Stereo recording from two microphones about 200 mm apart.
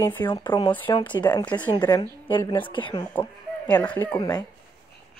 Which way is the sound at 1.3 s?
5° left (ahead or behind).